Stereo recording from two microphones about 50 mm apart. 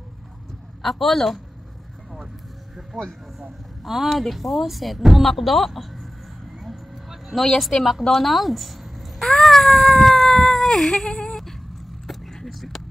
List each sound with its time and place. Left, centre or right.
0.8 s speech: centre
2.9 s speech: centre
3.8 s speech: centre
6.6 s a sound: centre
7.4 s speech: centre
8.1 s a sound: centre
12.1 s vehicle: centre